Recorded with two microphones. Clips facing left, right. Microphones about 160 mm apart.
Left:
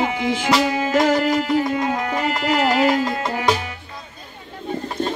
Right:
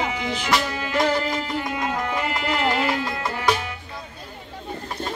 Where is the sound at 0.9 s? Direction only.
45° left (ahead or behind).